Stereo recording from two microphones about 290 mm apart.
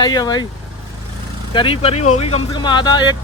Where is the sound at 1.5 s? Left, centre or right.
Centre.